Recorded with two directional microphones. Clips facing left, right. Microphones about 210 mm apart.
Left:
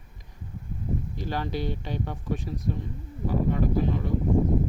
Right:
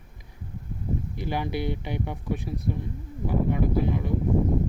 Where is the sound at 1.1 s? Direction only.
15° right (ahead or behind).